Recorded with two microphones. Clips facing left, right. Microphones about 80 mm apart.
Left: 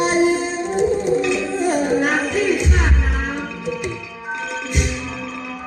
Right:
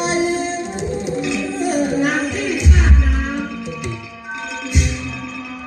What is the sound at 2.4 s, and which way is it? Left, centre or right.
Music, left.